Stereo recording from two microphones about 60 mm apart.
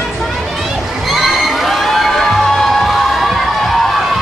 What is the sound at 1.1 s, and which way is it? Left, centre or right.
Crowd, centre.